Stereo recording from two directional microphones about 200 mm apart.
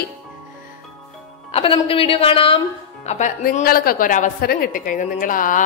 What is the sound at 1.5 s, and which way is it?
A woman's voice, 25° left (ahead or behind).